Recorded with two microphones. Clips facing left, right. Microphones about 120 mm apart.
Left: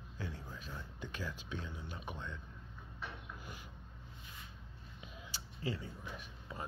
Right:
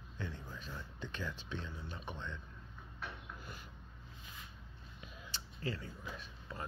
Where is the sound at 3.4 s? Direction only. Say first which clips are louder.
Even; 15° left (ahead or behind).